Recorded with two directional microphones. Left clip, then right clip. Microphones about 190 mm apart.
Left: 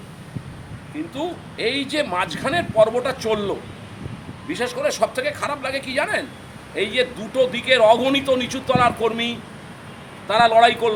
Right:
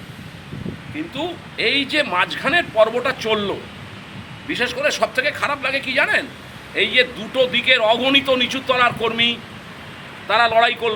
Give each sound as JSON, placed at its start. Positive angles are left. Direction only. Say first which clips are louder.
{"t": 0.9, "sound": "speech", "louder": "right 1 dB", "side_deg": 5}